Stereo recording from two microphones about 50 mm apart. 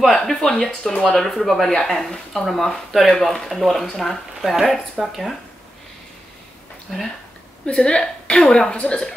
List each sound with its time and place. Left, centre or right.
0.0 s a woman's voice: centre
6.9 s speech: centre
7.6 s a woman's voice: centre